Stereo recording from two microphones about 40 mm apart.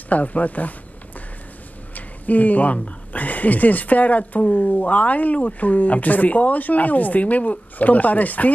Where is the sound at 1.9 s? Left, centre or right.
Left.